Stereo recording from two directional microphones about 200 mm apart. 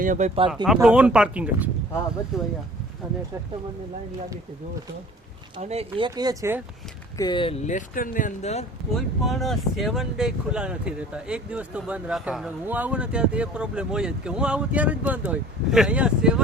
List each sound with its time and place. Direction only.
0.0 s speech: 40° right (ahead or behind)
0.5 s speech: centre (ahead or behind)
5.5 s speech: 30° right (ahead or behind)
6.1 s speech: 20° right (ahead or behind)
7.2 s speech: 25° left (ahead or behind)
9.0 s speech: centre (ahead or behind)